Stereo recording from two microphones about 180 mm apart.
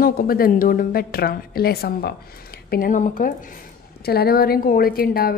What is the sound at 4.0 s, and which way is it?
Speech, 60° left (ahead or behind).